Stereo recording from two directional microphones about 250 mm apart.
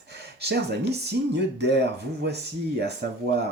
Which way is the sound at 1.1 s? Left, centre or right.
Right.